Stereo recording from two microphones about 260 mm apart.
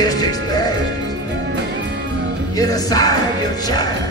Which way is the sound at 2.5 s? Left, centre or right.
Centre.